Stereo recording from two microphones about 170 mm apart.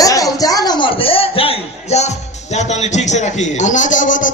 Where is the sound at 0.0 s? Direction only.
20° left (ahead or behind).